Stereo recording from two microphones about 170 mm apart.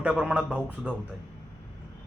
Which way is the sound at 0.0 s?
5° right (ahead or behind).